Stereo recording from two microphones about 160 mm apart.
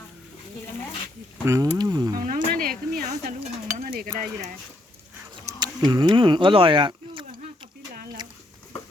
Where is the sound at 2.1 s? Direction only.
60° right (ahead or behind).